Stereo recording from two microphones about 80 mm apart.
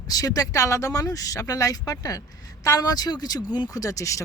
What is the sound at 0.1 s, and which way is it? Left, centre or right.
Speech, left.